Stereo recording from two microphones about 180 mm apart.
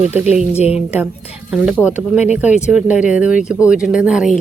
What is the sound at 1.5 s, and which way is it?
Speech, 5° right (ahead or behind).